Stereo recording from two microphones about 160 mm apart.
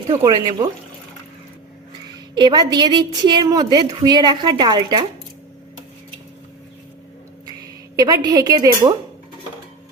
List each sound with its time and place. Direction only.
0.2 s a woman's voice: 25° right (ahead or behind)
2.3 s a woman's voice: 25° right (ahead or behind)
7.9 s a woman's voice: 25° right (ahead or behind)